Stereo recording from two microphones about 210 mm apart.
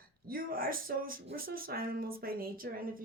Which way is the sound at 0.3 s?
45° right (ahead or behind).